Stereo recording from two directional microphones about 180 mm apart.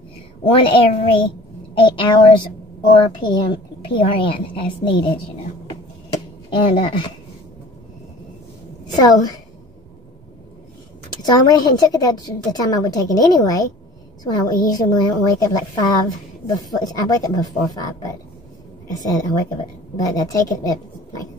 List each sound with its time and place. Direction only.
0.5 s a woman's voice: 30° left (ahead or behind)
6.7 s a woman's voice: 25° left (ahead or behind)
8.8 s a woman's voice: 20° left (ahead or behind)
11.2 s a woman's voice: 20° left (ahead or behind)
20.6 s a sound: 20° left (ahead or behind)